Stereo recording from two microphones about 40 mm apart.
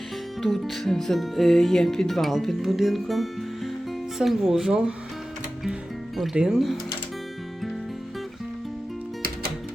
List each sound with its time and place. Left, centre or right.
0.4 s speech: centre
6.3 s speech: centre